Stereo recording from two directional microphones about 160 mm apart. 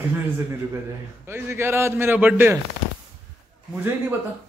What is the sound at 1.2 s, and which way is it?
A man's voice, 15° right (ahead or behind).